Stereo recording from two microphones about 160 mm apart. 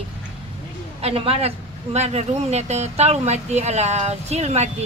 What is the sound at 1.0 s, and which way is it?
Speech, 35° right (ahead or behind).